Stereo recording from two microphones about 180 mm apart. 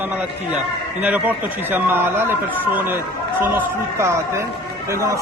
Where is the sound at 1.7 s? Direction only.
10° right (ahead or behind).